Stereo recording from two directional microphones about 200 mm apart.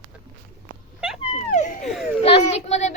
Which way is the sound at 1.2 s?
30° left (ahead or behind).